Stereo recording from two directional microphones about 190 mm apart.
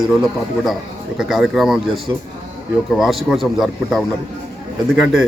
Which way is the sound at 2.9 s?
Centre (ahead or behind).